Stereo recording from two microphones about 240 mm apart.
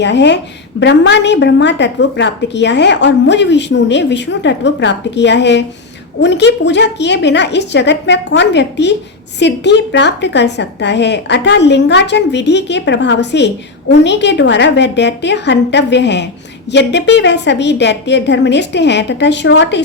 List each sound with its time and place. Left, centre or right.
0.0 s a woman's voice: left